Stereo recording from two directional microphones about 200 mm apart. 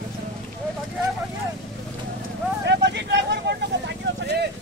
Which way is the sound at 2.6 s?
60° right (ahead or behind).